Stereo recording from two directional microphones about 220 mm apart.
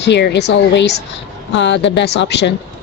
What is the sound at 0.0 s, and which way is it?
Speech, 50° left (ahead or behind).